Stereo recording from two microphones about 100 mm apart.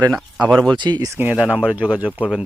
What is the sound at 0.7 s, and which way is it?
Speech, 50° right (ahead or behind).